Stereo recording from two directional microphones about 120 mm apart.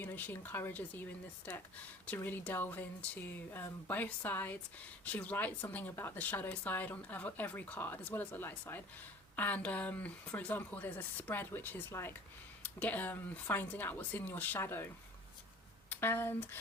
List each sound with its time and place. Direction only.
0.0 s speech: 15° left (ahead or behind)
15.9 s speech: 20° left (ahead or behind)